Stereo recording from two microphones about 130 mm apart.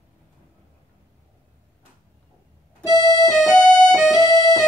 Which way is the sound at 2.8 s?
25° left (ahead or behind).